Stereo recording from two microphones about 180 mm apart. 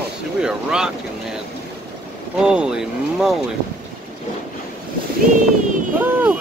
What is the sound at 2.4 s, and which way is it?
Speech, 5° right (ahead or behind).